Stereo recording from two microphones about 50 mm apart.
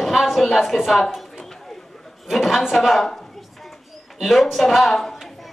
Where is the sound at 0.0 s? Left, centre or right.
Centre.